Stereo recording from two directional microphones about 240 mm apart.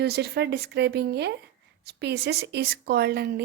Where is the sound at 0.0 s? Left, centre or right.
Right.